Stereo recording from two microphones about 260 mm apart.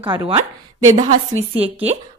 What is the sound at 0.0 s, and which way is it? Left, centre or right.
Speech, centre.